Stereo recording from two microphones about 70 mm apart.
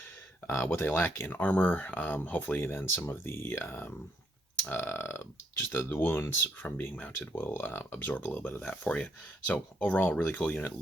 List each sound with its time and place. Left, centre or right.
0.4 s speech: left
1.0 s speech: left
2.6 s speech: left
7.3 s speech: left